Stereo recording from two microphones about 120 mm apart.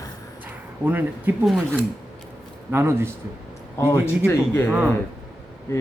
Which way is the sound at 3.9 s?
20° left (ahead or behind).